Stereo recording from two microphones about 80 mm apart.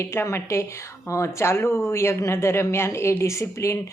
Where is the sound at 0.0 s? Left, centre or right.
Left.